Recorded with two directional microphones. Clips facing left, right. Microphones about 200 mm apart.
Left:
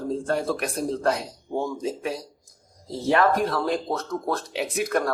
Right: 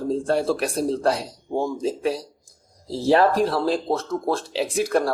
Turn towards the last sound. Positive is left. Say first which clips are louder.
# right 3 dB
turn(degrees=-30)  # may be behind; listen again after turning